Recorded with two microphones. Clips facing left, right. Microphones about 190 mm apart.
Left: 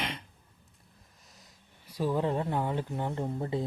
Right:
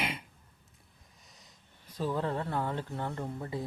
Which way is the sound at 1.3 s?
Centre (ahead or behind).